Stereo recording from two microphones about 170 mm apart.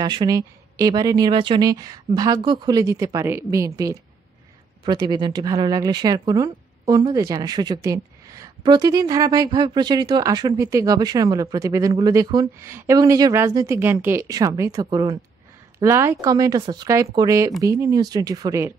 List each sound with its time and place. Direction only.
0.0 s speech: 25° right (ahead or behind)